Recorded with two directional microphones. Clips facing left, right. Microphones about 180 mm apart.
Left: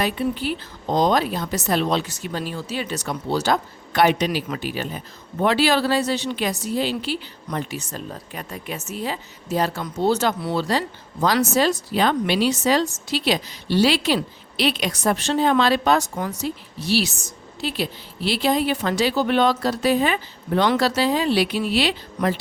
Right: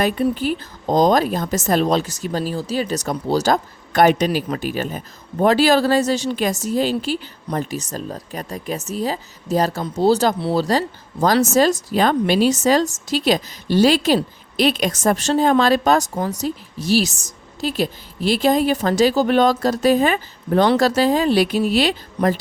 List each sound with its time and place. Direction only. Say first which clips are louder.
0.0 s a woman's voice: right 4 dB; 45° right (ahead or behind)